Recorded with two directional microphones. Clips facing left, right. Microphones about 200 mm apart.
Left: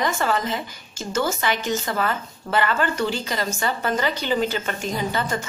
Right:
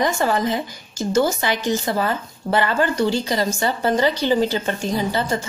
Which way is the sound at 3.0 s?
35° right (ahead or behind).